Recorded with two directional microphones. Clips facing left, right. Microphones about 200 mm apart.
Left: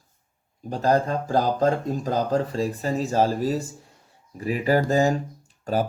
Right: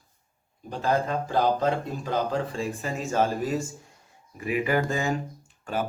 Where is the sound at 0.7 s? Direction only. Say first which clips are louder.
Left 4 dB; 40° left (ahead or behind).